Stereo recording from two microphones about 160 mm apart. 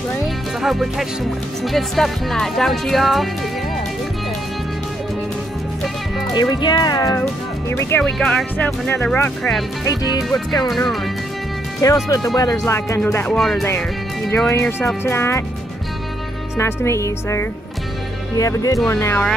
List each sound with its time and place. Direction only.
0.6 s music: centre (ahead or behind)
1.6 s speech: centre (ahead or behind)
6.3 s speech: 25° left (ahead or behind)
8.0 s speech: 5° left (ahead or behind)
9.8 s speech: 20° left (ahead or behind)
10.7 s speech: centre (ahead or behind)
11.8 s speech: 20° left (ahead or behind); by 13.7 s centre (ahead or behind)
14.5 s speech: 15° left (ahead or behind)
16.5 s speech: 15° left (ahead or behind)